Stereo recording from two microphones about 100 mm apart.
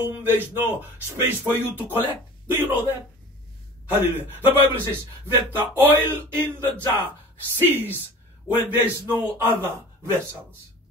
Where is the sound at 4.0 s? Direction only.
20° right (ahead or behind).